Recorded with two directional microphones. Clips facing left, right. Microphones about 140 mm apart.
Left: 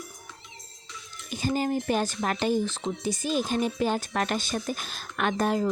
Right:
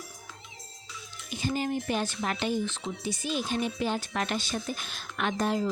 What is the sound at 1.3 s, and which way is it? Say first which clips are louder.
A woman's voice: left 3 dB; 40° left (ahead or behind).